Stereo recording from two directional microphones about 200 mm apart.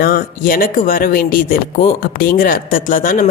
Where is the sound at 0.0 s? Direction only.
45° left (ahead or behind).